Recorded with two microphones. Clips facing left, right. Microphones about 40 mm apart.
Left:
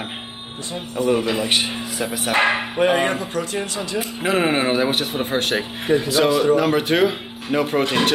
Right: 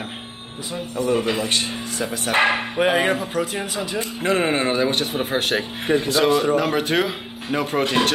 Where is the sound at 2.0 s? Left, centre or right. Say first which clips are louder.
Left 1 dB; centre.